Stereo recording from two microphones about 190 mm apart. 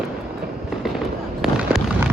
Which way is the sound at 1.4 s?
Centre (ahead or behind).